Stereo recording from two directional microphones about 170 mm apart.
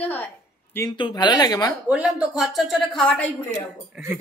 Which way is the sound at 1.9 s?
5° right (ahead or behind).